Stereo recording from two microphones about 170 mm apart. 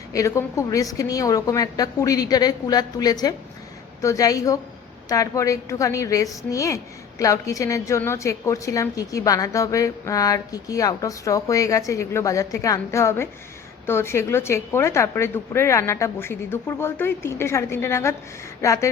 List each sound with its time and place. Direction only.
0.1 s a woman's voice: 20° left (ahead or behind)